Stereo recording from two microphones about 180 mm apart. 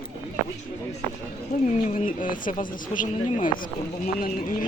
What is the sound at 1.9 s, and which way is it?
Speech, 45° left (ahead or behind).